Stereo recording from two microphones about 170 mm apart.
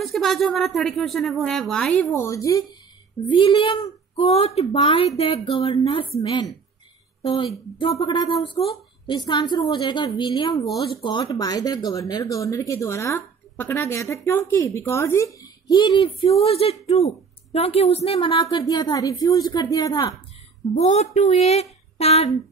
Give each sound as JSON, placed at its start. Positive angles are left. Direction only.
{"t": 0.0, "sound": "speech", "side_deg": 0}
{"t": 7.8, "sound": "speech", "side_deg": 30}
{"t": 20.7, "sound": "speech", "side_deg": 40}